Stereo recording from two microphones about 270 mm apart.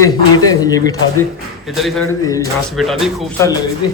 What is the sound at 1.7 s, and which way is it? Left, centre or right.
Speech, centre.